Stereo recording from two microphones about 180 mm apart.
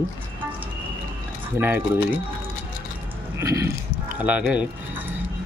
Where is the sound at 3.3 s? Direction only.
15° right (ahead or behind).